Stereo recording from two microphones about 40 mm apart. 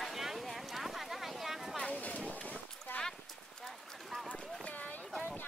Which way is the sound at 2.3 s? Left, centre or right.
Left.